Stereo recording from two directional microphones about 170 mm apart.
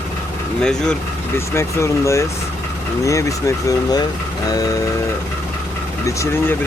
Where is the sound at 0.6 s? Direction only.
5° left (ahead or behind).